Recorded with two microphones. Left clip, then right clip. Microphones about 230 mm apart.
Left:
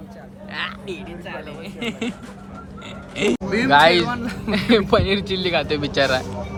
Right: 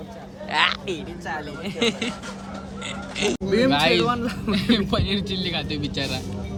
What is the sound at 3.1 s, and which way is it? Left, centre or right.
A man's voice, centre.